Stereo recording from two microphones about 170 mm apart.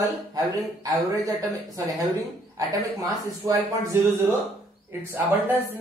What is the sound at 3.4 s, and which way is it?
Speech, 15° right (ahead or behind).